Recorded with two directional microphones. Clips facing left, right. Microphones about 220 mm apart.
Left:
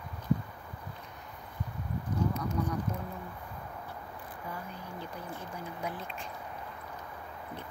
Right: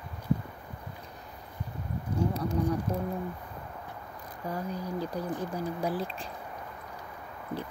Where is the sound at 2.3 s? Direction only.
35° right (ahead or behind).